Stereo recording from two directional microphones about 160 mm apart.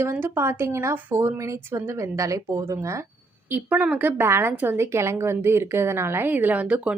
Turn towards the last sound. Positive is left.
turn(degrees=-10)  # may be behind; listen again after turning